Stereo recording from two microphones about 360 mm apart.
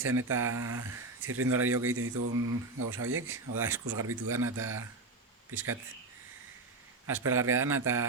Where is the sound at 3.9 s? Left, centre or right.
Right.